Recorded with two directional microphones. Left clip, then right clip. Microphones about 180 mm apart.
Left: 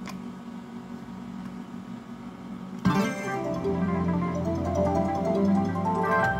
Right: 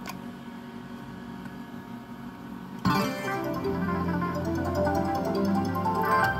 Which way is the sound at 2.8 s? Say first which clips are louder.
Even; 30° right (ahead or behind).